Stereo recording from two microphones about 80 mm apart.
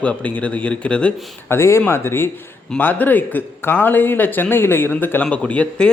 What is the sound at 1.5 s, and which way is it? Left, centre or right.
A man's voice, left.